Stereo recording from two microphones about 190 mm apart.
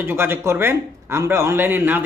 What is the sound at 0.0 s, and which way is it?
A man's voice, 10° right (ahead or behind).